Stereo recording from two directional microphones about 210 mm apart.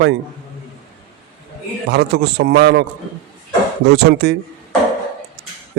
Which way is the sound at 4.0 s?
55° right (ahead or behind).